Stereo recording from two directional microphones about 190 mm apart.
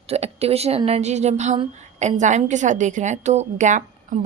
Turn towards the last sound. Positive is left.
turn(degrees=-40)  # may be behind; listen again after turning